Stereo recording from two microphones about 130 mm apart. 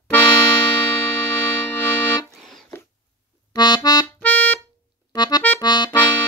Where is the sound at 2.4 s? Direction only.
Centre (ahead or behind).